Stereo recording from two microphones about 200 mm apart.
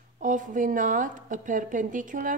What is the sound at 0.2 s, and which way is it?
A woman's voice, 40° right (ahead or behind).